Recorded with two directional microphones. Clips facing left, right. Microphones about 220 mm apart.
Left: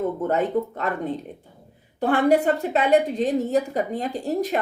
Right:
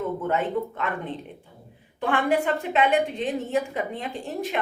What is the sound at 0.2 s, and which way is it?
A woman's voice, 40° left (ahead or behind).